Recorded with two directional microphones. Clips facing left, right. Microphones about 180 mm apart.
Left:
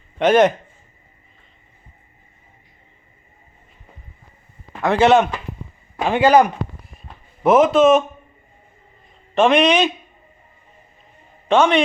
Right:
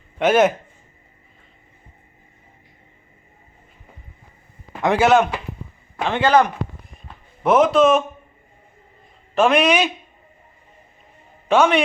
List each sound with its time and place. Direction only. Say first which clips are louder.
0.2 s a man's voice: left 2 dB; 5° right (ahead or behind)
4.8 s a man's voice: left 1 dB; 15° right (ahead or behind)
5.0 s speech: left 2 dB; centre (ahead or behind)
6.0 s a man's voice: left 3 dB; 10° left (ahead or behind)
7.4 s speech: left 2 dB; centre (ahead or behind)
9.3 s speech: left 2 dB; centre (ahead or behind)
11.4 s a man's voice: left 1 dB; 5° right (ahead or behind)